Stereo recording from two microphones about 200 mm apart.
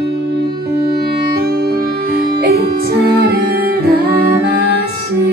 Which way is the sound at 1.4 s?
50° right (ahead or behind).